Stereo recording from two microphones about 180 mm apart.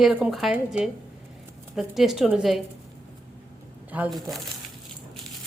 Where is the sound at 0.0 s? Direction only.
5° right (ahead or behind).